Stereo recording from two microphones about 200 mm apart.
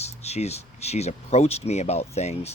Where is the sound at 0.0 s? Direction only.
30° left (ahead or behind).